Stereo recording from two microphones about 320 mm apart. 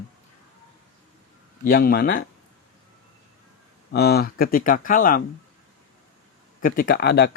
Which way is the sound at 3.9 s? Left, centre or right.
Left.